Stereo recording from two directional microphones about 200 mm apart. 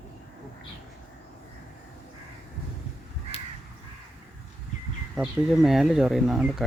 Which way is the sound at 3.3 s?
30° left (ahead or behind).